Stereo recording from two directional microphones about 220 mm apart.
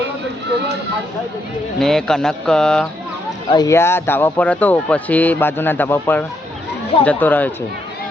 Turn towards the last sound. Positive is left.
turn(degrees=10)  # may be behind; listen again after turning